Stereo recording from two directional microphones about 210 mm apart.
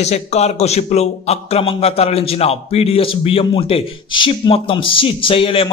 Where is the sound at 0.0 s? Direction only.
30° left (ahead or behind).